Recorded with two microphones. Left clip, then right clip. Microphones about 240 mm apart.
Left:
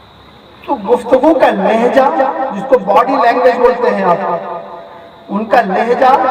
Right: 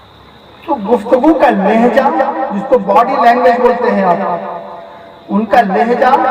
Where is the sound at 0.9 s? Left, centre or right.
Left.